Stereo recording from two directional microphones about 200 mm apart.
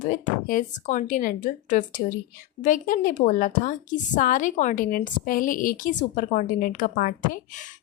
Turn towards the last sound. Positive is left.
turn(degrees=40)  # may be behind; listen again after turning